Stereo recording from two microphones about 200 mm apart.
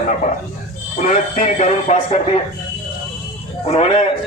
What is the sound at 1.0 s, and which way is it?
A man's voice, 40° left (ahead or behind).